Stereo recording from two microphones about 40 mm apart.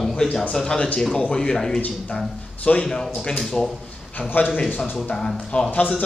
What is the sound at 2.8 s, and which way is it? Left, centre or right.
Speech, centre.